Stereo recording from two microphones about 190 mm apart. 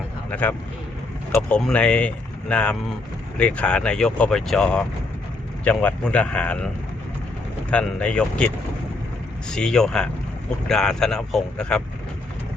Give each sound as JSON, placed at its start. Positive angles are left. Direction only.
{"t": 0.3, "sound": "speech", "side_deg": 5}
{"t": 7.7, "sound": "speech", "side_deg": 5}
{"t": 9.5, "sound": "speech", "side_deg": 5}